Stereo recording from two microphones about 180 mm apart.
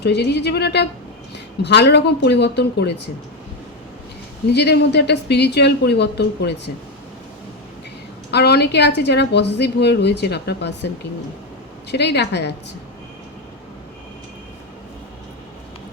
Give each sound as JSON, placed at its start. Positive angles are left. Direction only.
{"t": 0.0, "sound": "a woman's voice", "side_deg": 70}
{"t": 4.4, "sound": "a woman's voice", "side_deg": 70}
{"t": 8.3, "sound": "a woman's voice", "side_deg": 65}
{"t": 11.9, "sound": "a woman's voice", "side_deg": 70}